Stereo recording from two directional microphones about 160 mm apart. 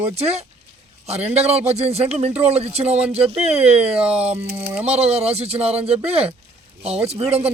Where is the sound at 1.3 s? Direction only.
40° right (ahead or behind).